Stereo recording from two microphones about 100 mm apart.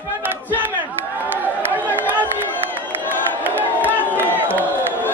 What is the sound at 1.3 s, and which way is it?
Chatter, 20° right (ahead or behind).